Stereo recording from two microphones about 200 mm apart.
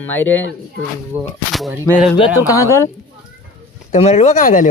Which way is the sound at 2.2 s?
15° left (ahead or behind).